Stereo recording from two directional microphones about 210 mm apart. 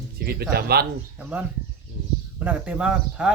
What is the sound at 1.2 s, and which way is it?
A man's voice, 5° right (ahead or behind).